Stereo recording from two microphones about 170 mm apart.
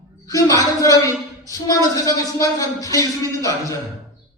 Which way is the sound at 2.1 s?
20° left (ahead or behind).